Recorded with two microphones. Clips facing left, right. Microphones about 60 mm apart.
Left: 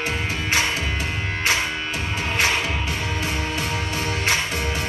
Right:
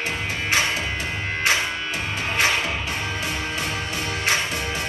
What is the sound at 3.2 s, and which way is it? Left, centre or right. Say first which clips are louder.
Music: left 1 dB; left.